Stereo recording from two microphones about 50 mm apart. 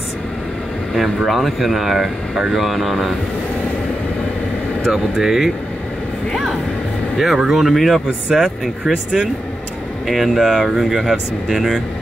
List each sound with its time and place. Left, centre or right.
0.9 s speech: centre
4.9 s speech: centre
8.9 s speech: centre
10.0 s speech: centre